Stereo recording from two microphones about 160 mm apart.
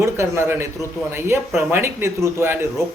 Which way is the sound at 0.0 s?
15° right (ahead or behind).